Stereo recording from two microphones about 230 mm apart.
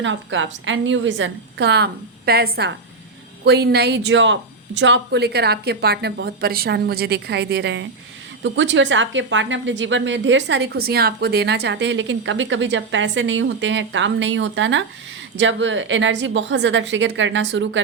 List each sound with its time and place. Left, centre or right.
0.0 s a woman's voice: right